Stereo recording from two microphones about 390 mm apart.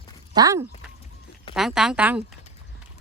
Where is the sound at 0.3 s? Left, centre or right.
Centre.